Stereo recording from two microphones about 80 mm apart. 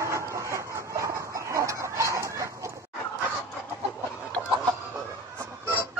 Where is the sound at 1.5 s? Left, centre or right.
Right.